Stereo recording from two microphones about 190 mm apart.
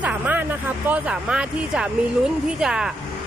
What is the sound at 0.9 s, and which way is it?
Speech, 5° right (ahead or behind).